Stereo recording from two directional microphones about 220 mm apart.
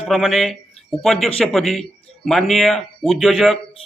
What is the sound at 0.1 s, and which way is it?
Speech, centre (ahead or behind).